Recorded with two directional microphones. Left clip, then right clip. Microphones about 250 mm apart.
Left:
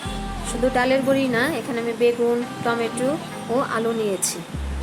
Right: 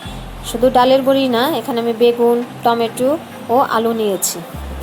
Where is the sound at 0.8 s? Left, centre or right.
Centre.